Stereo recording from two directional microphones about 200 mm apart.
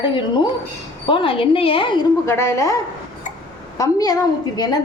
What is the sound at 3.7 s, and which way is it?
A woman's voice, 20° left (ahead or behind).